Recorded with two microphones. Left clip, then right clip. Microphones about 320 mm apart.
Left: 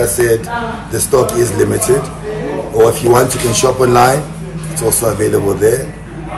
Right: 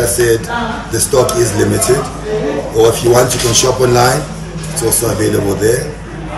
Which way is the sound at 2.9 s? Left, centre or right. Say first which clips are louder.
Right 1 dB; centre.